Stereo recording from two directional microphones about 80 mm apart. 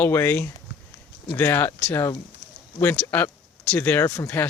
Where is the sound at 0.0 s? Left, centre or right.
Left.